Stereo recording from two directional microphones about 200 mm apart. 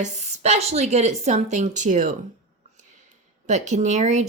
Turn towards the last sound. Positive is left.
turn(degrees=-35)  # may be behind; listen again after turning